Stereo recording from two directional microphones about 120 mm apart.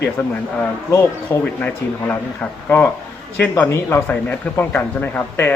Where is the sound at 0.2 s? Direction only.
20° left (ahead or behind).